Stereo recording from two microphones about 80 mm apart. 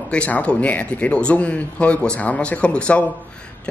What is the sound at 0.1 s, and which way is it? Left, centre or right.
Speech, centre.